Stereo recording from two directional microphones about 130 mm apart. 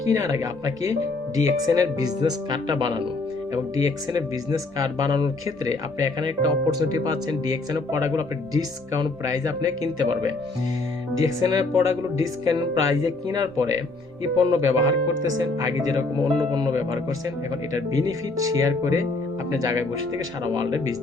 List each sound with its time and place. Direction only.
0.0 s speech: 25° right (ahead or behind)